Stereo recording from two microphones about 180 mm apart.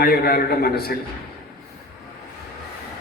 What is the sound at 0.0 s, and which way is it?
Speech, 60° left (ahead or behind).